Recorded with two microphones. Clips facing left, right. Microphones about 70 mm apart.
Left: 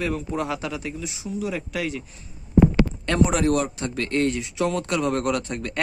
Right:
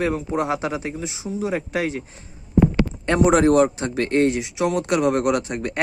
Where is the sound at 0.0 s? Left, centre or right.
Right.